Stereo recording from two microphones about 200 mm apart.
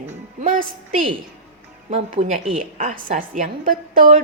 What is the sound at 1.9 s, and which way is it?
A woman's voice, 35° right (ahead or behind).